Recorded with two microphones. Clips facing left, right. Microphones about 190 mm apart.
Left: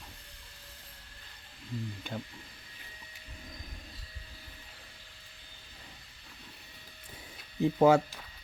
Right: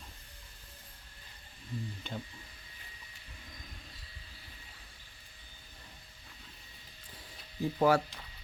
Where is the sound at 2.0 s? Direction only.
10° left (ahead or behind).